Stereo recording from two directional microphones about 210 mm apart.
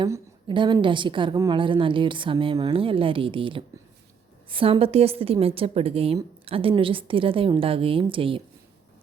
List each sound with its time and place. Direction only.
0.0 s a woman's voice: 20° right (ahead or behind)